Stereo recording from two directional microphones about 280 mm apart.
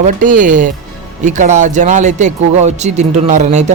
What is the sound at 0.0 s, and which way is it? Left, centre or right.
Speech, right.